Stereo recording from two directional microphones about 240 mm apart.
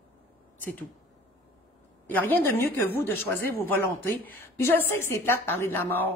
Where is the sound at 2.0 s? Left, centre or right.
Centre.